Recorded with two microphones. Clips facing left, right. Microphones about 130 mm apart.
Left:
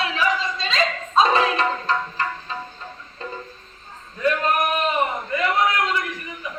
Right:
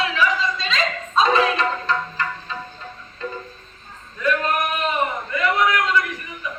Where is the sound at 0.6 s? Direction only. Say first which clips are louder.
Left 1 dB; 30° left (ahead or behind).